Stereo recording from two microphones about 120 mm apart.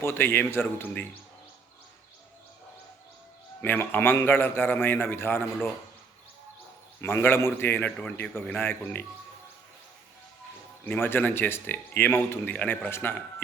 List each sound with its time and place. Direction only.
0.0 s a man's voice: 20° left (ahead or behind)
3.6 s a man's voice: 15° left (ahead or behind)
7.0 s speech: 15° left (ahead or behind)
10.8 s speech: 15° left (ahead or behind)